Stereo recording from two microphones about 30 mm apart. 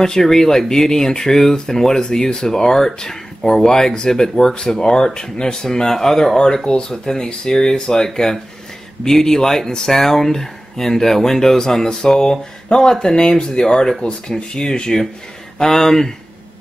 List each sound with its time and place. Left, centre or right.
0.0 s speech: centre
12.7 s speech: left
13.0 s speech: left